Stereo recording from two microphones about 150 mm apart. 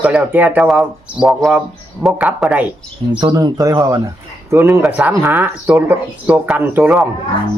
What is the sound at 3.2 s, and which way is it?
Speech, 25° right (ahead or behind).